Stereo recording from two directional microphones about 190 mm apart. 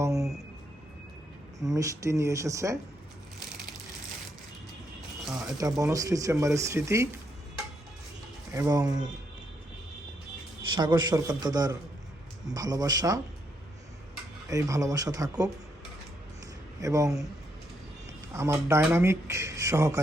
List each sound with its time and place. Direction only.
0.0 s a sound: 15° right (ahead or behind)
1.6 s speech: 15° right (ahead or behind)
5.5 s speech: 15° right (ahead or behind)
8.5 s a man's voice: 15° right (ahead or behind)
10.8 s a man's voice: 20° right (ahead or behind)
14.5 s speech: 15° right (ahead or behind)
16.8 s speech: 15° right (ahead or behind)
18.3 s speech: 15° right (ahead or behind)